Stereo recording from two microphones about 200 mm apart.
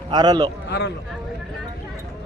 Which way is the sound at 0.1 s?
20° right (ahead or behind).